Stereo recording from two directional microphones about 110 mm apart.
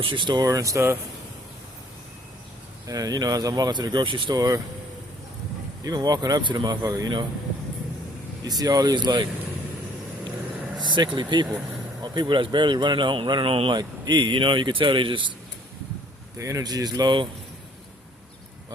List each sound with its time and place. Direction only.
0.0 s speech: 50° right (ahead or behind)
0.4 s speech: 30° right (ahead or behind)
2.8 s speech: 35° right (ahead or behind)
4.4 s speech: 30° right (ahead or behind)
5.8 s speech: 40° right (ahead or behind)
8.4 s speech: 35° right (ahead or behind)
10.8 s speech: 40° right (ahead or behind)
13.7 s speech: 40° right (ahead or behind)
16.4 s speech: 30° right (ahead or behind)